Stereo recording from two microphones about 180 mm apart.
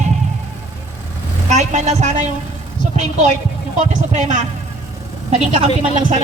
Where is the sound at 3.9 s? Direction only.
40° right (ahead or behind).